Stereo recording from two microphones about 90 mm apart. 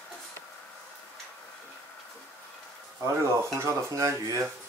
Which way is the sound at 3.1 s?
30° right (ahead or behind).